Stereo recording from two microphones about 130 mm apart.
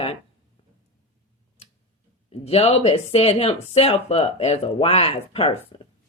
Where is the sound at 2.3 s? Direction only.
50° left (ahead or behind).